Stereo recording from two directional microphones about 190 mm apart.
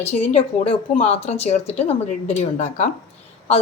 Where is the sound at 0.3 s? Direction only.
30° left (ahead or behind).